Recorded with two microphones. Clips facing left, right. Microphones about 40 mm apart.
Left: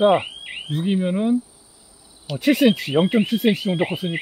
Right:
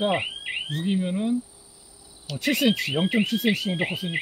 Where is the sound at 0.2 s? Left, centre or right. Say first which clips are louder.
Right 2 dB; centre.